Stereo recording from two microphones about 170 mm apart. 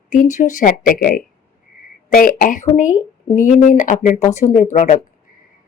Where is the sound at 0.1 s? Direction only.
45° left (ahead or behind).